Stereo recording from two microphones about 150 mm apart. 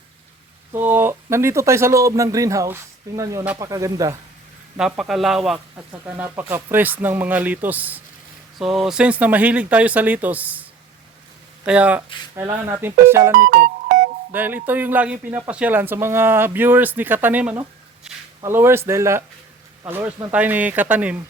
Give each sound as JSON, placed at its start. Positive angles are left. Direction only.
{"t": 0.7, "sound": "speech", "side_deg": -15}
{"t": 4.8, "sound": "a man's voice", "side_deg": -5}
{"t": 5.7, "sound": "speech", "side_deg": -15}
{"t": 12.4, "sound": "speech", "side_deg": -20}
{"t": 13.3, "sound": "music", "side_deg": -65}
{"t": 14.3, "sound": "speech", "side_deg": -10}